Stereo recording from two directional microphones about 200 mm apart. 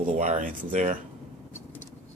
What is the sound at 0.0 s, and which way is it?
Speech, 35° right (ahead or behind).